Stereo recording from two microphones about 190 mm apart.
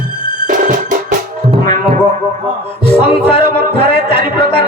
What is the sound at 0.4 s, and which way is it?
Music, 45° right (ahead or behind).